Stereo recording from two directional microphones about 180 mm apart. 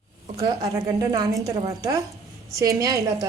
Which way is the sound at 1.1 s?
20° right (ahead or behind).